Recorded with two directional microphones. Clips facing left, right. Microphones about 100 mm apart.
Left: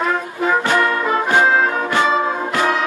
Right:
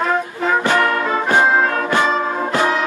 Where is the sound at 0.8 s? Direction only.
Centre (ahead or behind).